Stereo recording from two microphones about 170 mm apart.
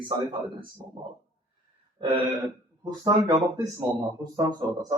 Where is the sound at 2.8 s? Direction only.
20° right (ahead or behind).